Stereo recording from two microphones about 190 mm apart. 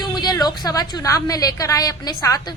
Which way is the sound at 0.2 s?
20° left (ahead or behind).